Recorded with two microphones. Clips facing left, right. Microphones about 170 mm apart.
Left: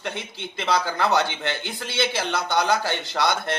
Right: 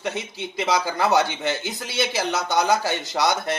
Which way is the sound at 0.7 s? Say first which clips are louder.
Right 1 dB; 5° right (ahead or behind).